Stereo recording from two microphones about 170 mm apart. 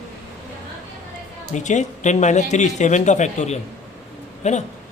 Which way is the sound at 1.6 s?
45° left (ahead or behind).